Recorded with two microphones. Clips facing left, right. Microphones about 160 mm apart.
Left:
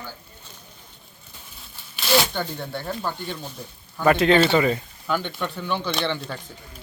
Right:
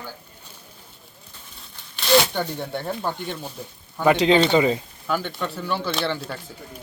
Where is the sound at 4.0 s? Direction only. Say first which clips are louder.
Even; 20° right (ahead or behind).